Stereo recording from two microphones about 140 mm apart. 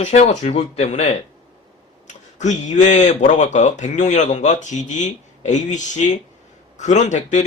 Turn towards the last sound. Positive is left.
turn(degrees=60)  # may be behind; listen again after turning